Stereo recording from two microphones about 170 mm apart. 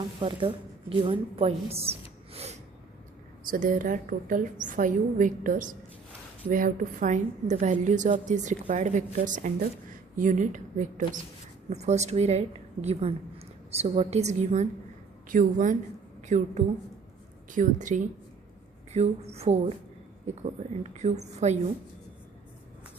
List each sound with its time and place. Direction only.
0.2 s a woman's voice: 30° right (ahead or behind)
3.5 s a woman's voice: 50° right (ahead or behind)
20.9 s a woman's voice: 40° right (ahead or behind)